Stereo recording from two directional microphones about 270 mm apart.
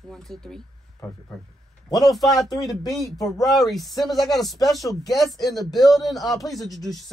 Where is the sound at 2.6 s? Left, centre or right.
Centre.